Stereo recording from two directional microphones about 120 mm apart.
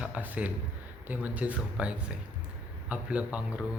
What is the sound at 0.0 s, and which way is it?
Speech, 10° right (ahead or behind).